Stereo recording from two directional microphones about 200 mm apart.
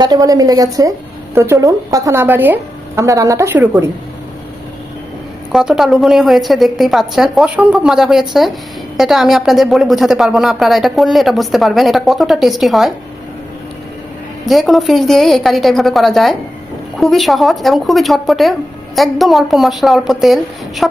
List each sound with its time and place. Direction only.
0.0 s a woman's voice: 20° right (ahead or behind)
5.5 s a woman's voice: 5° right (ahead or behind)
14.4 s a woman's voice: centre (ahead or behind)